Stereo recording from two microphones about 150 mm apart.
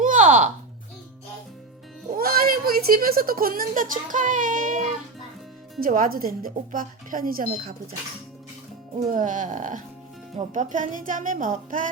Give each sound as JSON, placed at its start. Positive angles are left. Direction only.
{"t": 0.0, "sound": "music", "side_deg": -55}
{"t": 2.1, "sound": "speech", "side_deg": -80}
{"t": 5.8, "sound": "speech", "side_deg": -70}
{"t": 9.0, "sound": "speech", "side_deg": -60}